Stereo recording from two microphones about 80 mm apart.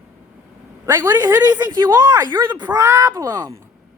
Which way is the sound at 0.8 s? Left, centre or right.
Right.